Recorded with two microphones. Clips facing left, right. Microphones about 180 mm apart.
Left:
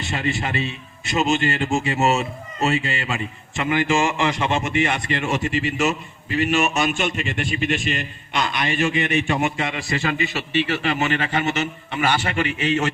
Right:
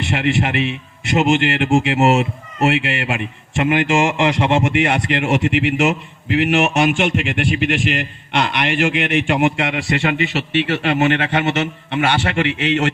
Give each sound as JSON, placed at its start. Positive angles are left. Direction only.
{"t": 0.0, "sound": "a man's voice", "side_deg": -70}